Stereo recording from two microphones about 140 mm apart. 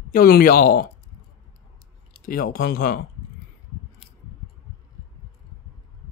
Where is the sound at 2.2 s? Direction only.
90° left.